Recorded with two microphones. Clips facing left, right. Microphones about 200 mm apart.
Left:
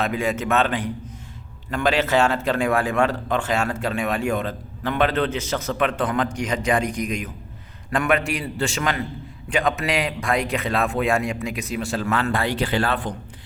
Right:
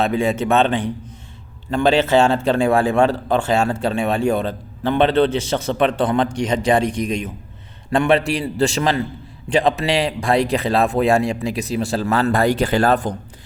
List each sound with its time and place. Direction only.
0.0 s a man's voice: 30° right (ahead or behind)